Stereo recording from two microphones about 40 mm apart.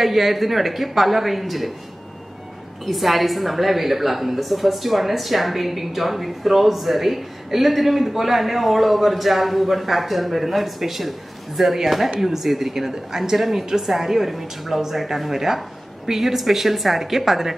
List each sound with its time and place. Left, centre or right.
0.0 s a woman's voice: centre
2.8 s a woman's voice: centre